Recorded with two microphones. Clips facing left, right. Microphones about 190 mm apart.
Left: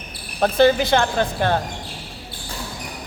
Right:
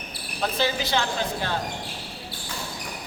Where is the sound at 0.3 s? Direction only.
55° left (ahead or behind).